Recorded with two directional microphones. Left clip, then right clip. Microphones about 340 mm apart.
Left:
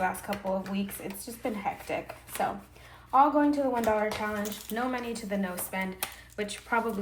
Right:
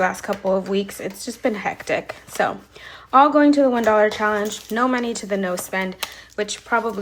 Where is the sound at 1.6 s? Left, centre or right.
Right.